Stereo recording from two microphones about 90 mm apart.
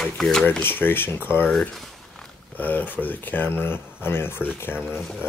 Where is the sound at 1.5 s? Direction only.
5° left (ahead or behind).